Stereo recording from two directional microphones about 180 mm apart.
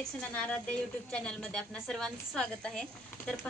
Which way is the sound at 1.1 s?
5° left (ahead or behind).